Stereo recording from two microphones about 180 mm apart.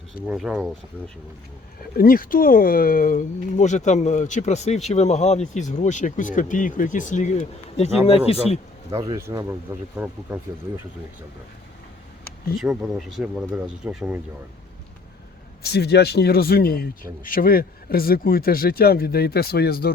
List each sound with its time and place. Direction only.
0.3 s speech: 5° right (ahead or behind)
2.0 s speech: 50° left (ahead or behind); by 8.4 s 35° left (ahead or behind)
8.9 s speech: 20° right (ahead or behind)
12.5 s speech: centre (ahead or behind)
15.6 s speech: 65° left (ahead or behind)